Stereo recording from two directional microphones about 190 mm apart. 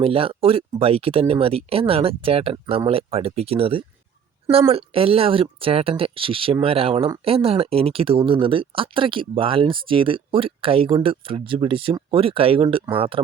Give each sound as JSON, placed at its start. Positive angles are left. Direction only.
{"t": 0.0, "sound": "speech", "side_deg": -30}